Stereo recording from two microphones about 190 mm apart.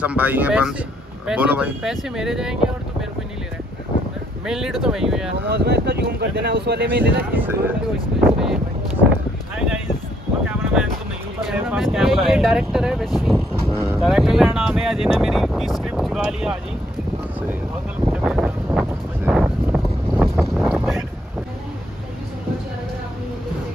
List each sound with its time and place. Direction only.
0.0 s speech: 10° right (ahead or behind)
4.5 s speech: 5° right (ahead or behind)
5.5 s speech: 60° right (ahead or behind)
7.3 s speech: 10° right (ahead or behind)
11.5 s speech: 5° right (ahead or behind)
13.2 s vehicle: 5° left (ahead or behind)
14.0 s speech: centre (ahead or behind)
18.1 s wind noise: 5° right (ahead or behind)